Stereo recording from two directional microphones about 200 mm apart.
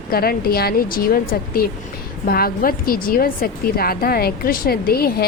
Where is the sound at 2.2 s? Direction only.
45° left (ahead or behind).